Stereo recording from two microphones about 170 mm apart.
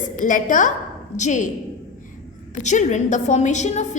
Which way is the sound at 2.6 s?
45° left (ahead or behind).